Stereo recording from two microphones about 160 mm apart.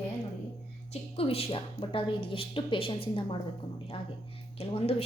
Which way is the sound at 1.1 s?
35° left (ahead or behind).